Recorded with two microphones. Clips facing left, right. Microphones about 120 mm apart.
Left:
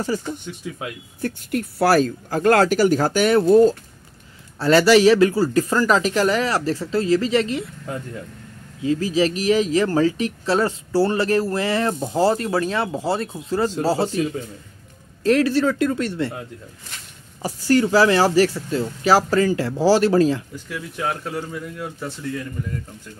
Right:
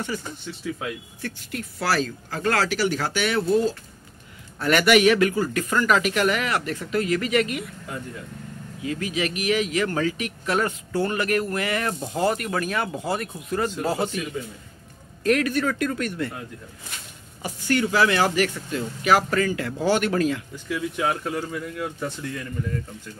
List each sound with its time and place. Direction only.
0.1 s speech: 35° left (ahead or behind)
1.2 s speech: 50° left (ahead or behind)
4.6 s speech: 30° left (ahead or behind)
8.8 s speech: 30° left (ahead or behind)
17.4 s speech: 35° left (ahead or behind)
20.6 s speech: 5° right (ahead or behind)